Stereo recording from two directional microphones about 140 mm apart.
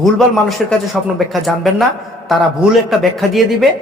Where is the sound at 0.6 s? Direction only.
Centre (ahead or behind).